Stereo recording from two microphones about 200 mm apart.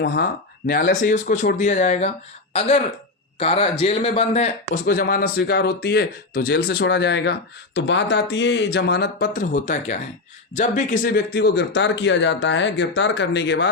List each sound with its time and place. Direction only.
0.0 s speech: 55° left (ahead or behind)
0.7 s speech: 45° left (ahead or behind)
4.9 s speech: 50° left (ahead or behind)